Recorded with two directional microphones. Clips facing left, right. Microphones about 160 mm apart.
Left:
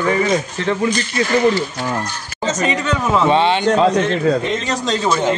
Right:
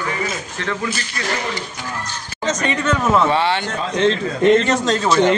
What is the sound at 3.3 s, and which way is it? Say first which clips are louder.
Speech: left 4 dB; 20° left (ahead or behind).